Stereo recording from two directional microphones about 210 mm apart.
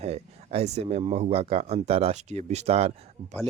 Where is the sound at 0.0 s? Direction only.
30° right (ahead or behind).